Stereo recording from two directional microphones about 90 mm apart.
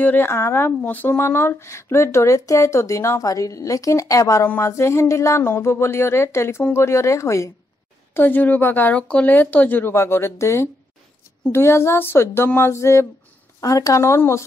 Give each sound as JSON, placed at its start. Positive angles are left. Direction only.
{"t": 0.0, "sound": "speech", "side_deg": 25}
{"t": 8.1, "sound": "speech", "side_deg": 20}
{"t": 13.6, "sound": "speech", "side_deg": 40}